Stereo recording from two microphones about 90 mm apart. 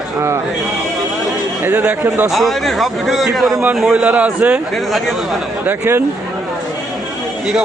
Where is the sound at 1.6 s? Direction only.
20° right (ahead or behind).